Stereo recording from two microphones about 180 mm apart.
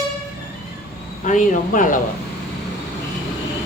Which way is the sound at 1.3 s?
45° left (ahead or behind).